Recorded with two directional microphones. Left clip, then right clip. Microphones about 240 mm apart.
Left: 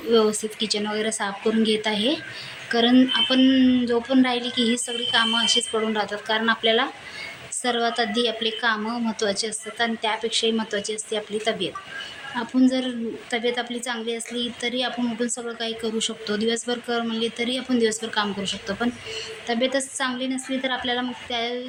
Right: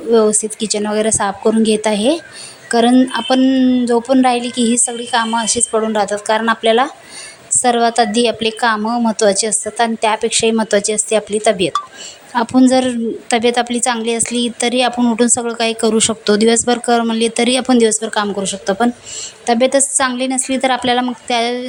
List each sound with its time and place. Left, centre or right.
0.1 s a woman's voice: right